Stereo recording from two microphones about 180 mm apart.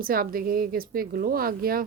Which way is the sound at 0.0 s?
55° right (ahead or behind).